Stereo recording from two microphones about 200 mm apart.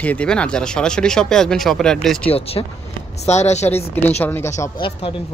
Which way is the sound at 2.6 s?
20° left (ahead or behind).